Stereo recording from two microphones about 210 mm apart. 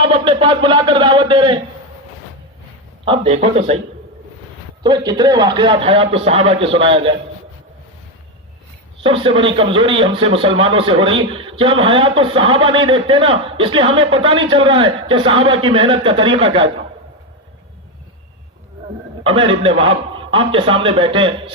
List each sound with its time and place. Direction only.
0.0 s a man's voice: 25° right (ahead or behind)
3.0 s a man's voice: 30° right (ahead or behind)
4.8 s a man's voice: 20° right (ahead or behind)
9.0 s a man's voice: 25° right (ahead or behind)
19.2 s a man's voice: 25° right (ahead or behind)